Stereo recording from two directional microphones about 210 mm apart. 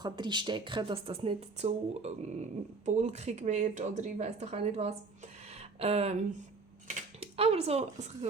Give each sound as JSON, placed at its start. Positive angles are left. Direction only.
{"t": 0.0, "sound": "speech", "side_deg": -20}
{"t": 5.5, "sound": "a sound", "side_deg": -30}
{"t": 6.8, "sound": "speech", "side_deg": -30}